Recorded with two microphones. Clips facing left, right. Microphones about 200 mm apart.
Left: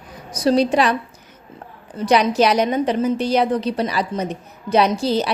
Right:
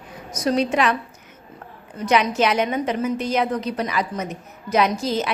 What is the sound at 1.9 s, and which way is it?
A woman's voice, 35° left (ahead or behind).